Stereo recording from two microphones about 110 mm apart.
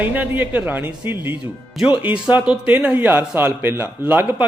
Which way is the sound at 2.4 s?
15° right (ahead or behind).